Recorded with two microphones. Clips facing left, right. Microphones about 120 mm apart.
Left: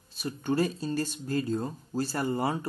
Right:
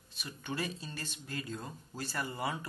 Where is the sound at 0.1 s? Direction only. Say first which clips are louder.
Left 11 dB; 40° left (ahead or behind).